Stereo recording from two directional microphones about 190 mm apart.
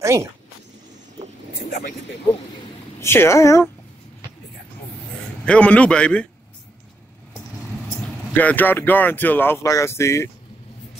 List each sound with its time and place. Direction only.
0.0 s speech: 15° right (ahead or behind)
3.0 s speech: 15° left (ahead or behind)
5.4 s a man's voice: 5° left (ahead or behind)
8.4 s speech: 10° left (ahead or behind)